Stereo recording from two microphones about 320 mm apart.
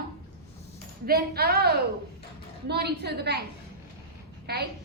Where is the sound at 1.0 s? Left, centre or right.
Right.